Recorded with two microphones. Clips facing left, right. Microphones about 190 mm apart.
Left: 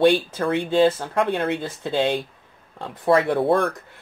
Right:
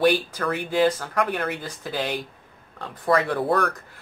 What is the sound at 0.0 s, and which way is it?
Speech, 25° left (ahead or behind).